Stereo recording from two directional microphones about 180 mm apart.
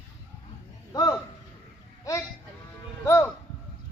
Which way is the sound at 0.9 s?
20° left (ahead or behind).